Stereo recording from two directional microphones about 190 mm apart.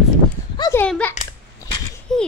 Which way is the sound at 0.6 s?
15° left (ahead or behind).